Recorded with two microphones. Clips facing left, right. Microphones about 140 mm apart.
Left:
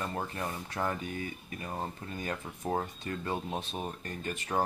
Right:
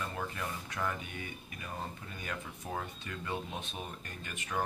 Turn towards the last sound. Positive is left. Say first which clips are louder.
# left 6 dB
turn(degrees=35)  # may be behind; listen again after turning